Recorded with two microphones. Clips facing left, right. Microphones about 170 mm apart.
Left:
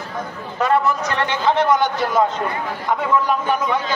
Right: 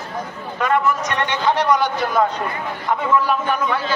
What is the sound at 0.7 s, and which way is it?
A man's voice, 30° left (ahead or behind).